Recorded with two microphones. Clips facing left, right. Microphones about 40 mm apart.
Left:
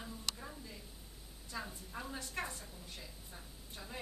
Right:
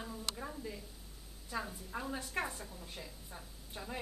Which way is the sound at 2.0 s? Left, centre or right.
Centre.